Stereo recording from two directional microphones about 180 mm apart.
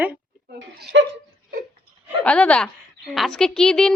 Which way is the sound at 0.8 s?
90° right.